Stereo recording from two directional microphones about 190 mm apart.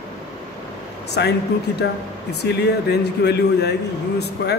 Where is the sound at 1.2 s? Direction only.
60° left (ahead or behind).